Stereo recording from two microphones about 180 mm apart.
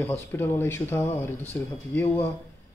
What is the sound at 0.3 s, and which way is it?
Speech, 10° left (ahead or behind).